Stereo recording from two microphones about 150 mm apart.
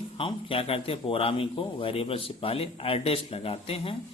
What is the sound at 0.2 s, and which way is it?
A man's voice, 35° left (ahead or behind).